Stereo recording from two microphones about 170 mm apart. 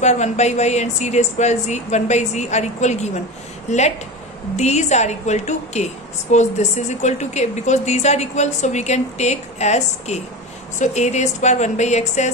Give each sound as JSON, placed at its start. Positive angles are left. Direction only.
{"t": 0.0, "sound": "a woman's voice", "side_deg": 45}